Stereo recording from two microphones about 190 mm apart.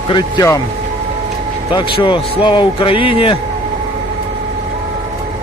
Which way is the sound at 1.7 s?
25° left (ahead or behind).